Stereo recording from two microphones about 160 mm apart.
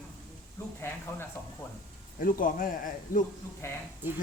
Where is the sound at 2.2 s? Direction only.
60° left (ahead or behind).